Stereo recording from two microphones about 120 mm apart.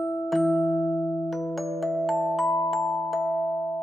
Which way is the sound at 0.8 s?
25° left (ahead or behind).